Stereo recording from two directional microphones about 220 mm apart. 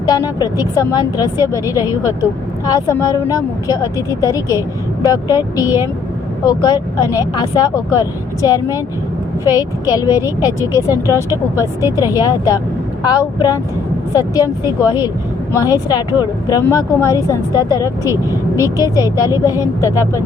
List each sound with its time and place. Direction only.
0.0 s speech: 15° left (ahead or behind)
11.9 s speech: 10° right (ahead or behind)
12.1 s speech: 15° left (ahead or behind)